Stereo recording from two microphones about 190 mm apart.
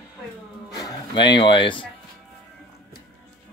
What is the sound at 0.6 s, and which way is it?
Music, 20° left (ahead or behind).